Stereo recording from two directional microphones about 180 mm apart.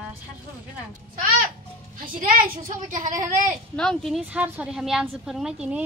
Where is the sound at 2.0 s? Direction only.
50° right (ahead or behind).